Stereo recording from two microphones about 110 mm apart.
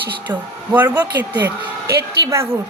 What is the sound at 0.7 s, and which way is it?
Speech, 15° right (ahead or behind).